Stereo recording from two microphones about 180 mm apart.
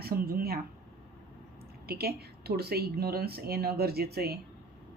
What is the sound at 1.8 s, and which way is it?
Speech, 60° right (ahead or behind).